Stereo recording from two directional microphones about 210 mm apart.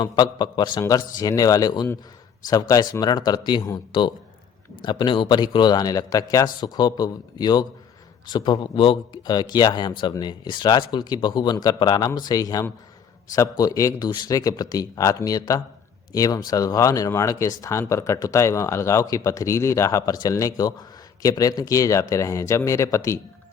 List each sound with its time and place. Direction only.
0.0 s speech: 20° left (ahead or behind)